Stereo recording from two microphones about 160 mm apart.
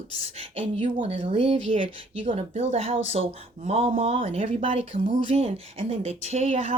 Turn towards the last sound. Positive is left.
turn(degrees=-40)  # may be behind; listen again after turning